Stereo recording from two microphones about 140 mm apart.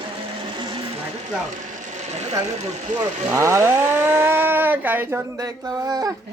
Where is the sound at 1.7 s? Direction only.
60° right (ahead or behind).